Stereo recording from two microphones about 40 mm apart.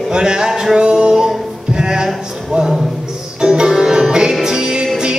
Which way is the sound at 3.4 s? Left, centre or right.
Centre.